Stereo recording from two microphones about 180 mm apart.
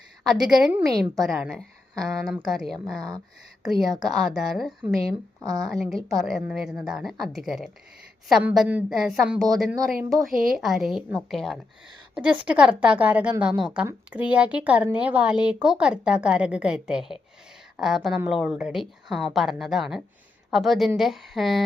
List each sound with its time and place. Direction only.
0.4 s a woman's voice: 5° right (ahead or behind)
5.4 s a woman's voice: 20° right (ahead or behind)
5.6 s a woman's voice: centre (ahead or behind)